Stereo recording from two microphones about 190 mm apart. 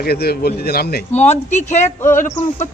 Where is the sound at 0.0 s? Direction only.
55° left (ahead or behind).